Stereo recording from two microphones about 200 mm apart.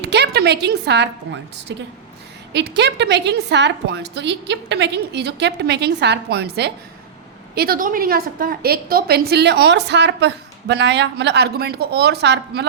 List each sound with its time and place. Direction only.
0.0 s a woman's voice: 55° right (ahead or behind)